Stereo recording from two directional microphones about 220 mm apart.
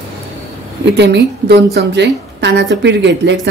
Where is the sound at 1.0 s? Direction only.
50° right (ahead or behind).